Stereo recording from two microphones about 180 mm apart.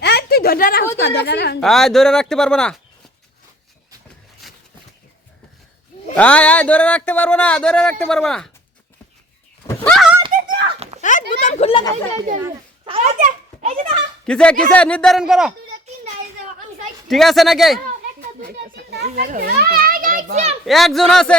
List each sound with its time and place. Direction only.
0.0 s a sound: 65° left (ahead or behind)
0.9 s a woman's voice: 65° left (ahead or behind)
1.6 s speech: centre (ahead or behind)
4.4 s a sound: centre (ahead or behind)
6.1 s speech: 5° left (ahead or behind)
9.6 s speech: 5° left (ahead or behind)
11.0 s speech: 45° left (ahead or behind)
12.1 s a child's voice: 45° right (ahead or behind)
12.8 s a child's voice: 30° right (ahead or behind)
13.1 s a child's voice: 40° right (ahead or behind)
14.3 s speech: 5° left (ahead or behind)
17.1 s speech: centre (ahead or behind)
18.2 s a child's voice: 55° right (ahead or behind); by 20.6 s 40° right (ahead or behind)
20.7 s speech: centre (ahead or behind)